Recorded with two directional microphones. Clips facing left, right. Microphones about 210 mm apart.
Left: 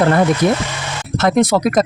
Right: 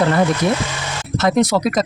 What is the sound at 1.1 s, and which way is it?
Speech, 55° left (ahead or behind).